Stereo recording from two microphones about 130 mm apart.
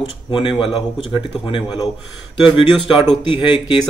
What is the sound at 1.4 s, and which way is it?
Speech, 35° left (ahead or behind).